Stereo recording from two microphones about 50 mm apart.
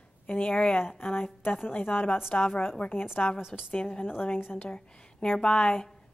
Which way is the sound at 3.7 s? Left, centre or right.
Left.